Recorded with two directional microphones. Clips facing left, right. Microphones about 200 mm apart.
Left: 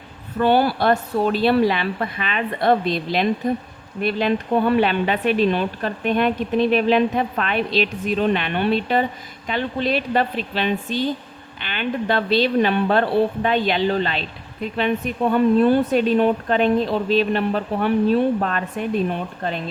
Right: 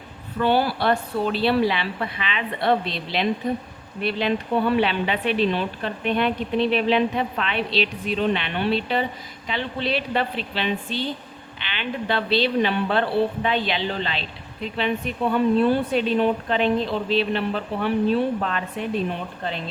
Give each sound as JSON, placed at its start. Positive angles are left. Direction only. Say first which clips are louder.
{"t": 0.3, "sound": "a woman's voice", "louder": "left 3 dB", "side_deg": 50}